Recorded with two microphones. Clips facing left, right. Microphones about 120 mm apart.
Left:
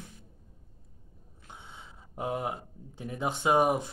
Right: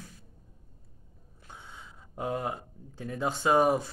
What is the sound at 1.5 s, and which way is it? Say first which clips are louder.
Speech: even; 25° left (ahead or behind).